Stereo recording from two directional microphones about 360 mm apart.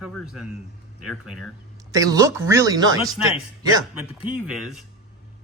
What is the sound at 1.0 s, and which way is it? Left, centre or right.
Speech, centre.